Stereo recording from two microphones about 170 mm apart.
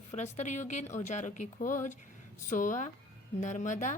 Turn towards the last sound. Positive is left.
turn(degrees=45)  # may be behind; listen again after turning